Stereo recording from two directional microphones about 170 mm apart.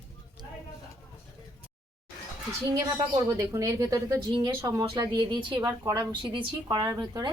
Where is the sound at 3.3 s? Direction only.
20° right (ahead or behind).